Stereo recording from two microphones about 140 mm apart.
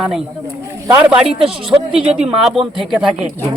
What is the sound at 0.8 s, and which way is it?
Speech, 20° right (ahead or behind).